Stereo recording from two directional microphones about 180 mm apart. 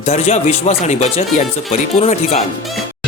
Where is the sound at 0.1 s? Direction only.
35° left (ahead or behind).